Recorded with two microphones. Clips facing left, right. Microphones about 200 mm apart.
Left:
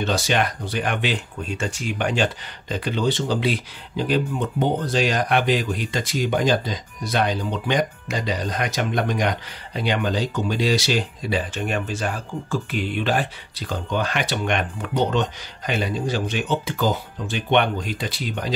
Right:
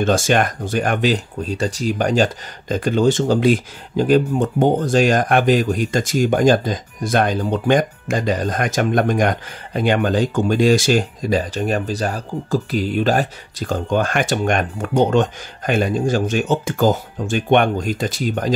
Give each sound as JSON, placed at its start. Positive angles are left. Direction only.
{"t": 0.0, "sound": "speech", "side_deg": -45}